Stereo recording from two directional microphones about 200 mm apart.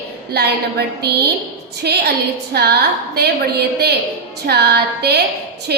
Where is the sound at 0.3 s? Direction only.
55° right (ahead or behind).